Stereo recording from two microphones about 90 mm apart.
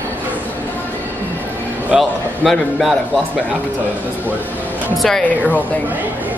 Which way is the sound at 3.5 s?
20° right (ahead or behind).